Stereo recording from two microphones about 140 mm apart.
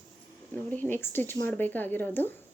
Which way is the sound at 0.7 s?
15° left (ahead or behind).